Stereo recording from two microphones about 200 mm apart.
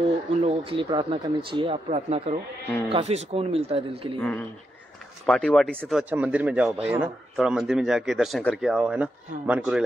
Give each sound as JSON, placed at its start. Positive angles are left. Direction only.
{"t": 0.3, "sound": "speech", "side_deg": -30}
{"t": 4.2, "sound": "speech", "side_deg": 10}